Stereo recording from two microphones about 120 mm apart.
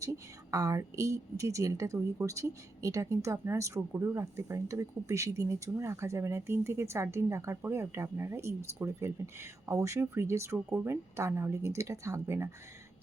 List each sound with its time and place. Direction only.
0.0 s speech: 30° right (ahead or behind)